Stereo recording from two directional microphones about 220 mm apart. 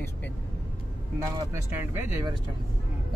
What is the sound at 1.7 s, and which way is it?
Speech, 15° right (ahead or behind).